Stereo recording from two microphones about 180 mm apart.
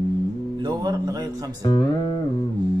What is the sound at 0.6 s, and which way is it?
Speech, 25° right (ahead or behind).